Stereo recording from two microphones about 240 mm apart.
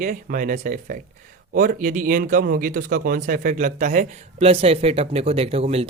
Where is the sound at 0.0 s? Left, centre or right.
Right.